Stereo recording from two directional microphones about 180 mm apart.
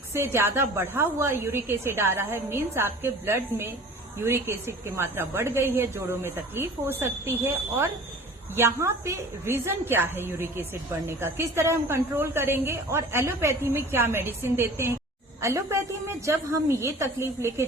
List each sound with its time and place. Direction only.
0.1 s a woman's voice: 15° right (ahead or behind)